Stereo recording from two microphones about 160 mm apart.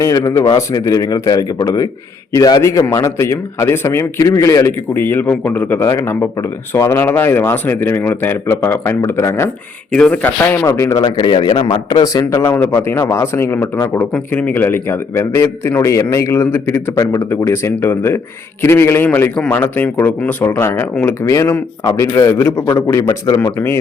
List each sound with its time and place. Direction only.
0.0 s a man's voice: 20° left (ahead or behind)
23.0 s speech: 30° left (ahead or behind)
23.6 s a man's voice: 15° left (ahead or behind)